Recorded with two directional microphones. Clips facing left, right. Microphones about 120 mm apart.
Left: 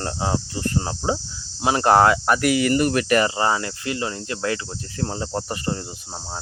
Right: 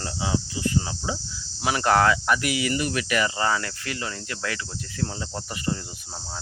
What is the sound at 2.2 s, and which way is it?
Speech, 45° left (ahead or behind).